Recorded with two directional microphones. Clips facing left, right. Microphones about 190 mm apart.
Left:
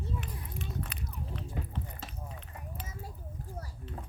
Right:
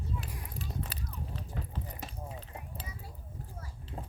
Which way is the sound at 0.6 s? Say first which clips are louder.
Left 1 dB; 30° right (ahead or behind).